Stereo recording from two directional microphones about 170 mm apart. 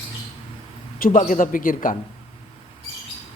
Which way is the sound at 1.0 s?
50° left (ahead or behind).